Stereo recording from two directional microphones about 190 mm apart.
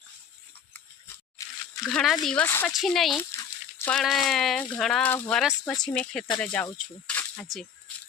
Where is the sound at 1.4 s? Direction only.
15° left (ahead or behind).